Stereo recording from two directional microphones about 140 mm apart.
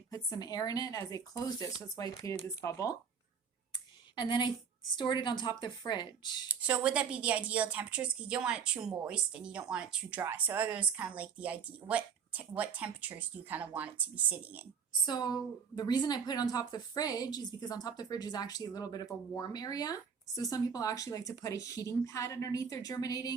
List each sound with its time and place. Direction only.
0.1 s a woman's voice: 30° left (ahead or behind)
4.1 s a woman's voice: 30° left (ahead or behind)
6.5 s speech: 10° right (ahead or behind)
15.0 s a woman's voice: 30° left (ahead or behind)